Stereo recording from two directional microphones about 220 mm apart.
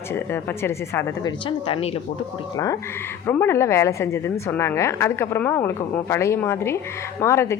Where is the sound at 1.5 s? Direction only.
25° left (ahead or behind).